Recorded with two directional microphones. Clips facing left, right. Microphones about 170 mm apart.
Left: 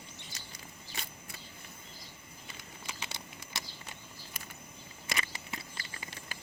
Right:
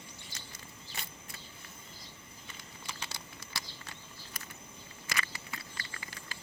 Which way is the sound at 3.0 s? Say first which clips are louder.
Left 1 dB; 20° left (ahead or behind).